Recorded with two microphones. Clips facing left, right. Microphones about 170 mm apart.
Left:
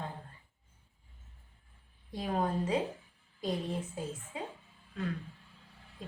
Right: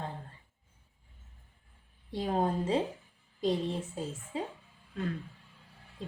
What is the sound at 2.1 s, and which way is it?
Speech, 30° right (ahead or behind).